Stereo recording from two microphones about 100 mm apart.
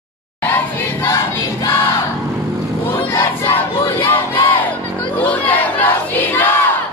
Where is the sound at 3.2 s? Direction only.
20° left (ahead or behind).